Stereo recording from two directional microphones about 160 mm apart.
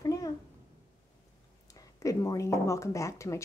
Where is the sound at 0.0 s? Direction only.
20° left (ahead or behind).